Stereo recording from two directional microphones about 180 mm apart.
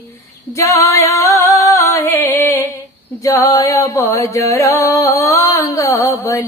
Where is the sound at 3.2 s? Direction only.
15° left (ahead or behind).